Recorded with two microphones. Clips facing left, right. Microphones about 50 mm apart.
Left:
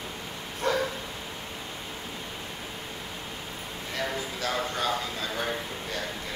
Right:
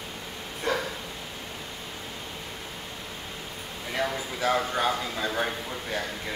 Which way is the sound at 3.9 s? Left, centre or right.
Centre.